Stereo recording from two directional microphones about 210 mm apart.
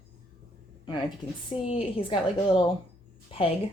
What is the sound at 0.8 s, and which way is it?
A woman's voice, 25° left (ahead or behind).